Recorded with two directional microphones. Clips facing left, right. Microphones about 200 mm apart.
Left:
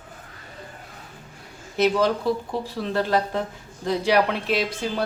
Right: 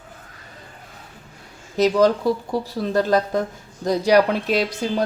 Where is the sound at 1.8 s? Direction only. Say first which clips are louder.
Right 4 dB; 40° right (ahead or behind).